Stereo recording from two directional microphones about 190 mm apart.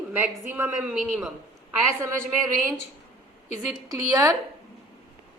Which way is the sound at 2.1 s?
45° right (ahead or behind).